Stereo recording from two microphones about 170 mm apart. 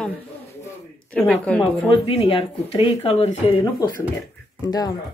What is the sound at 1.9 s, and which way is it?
Speech, 30° left (ahead or behind).